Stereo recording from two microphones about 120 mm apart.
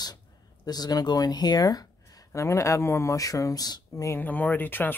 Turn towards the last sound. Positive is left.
turn(degrees=15)  # may be behind; listen again after turning